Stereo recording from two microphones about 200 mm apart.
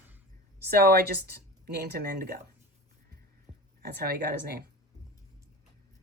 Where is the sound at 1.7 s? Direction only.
55° right (ahead or behind).